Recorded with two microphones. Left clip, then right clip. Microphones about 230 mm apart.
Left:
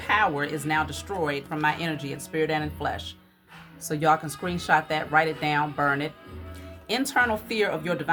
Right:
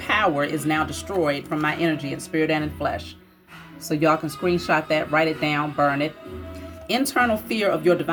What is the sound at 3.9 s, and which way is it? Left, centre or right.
Speech, centre.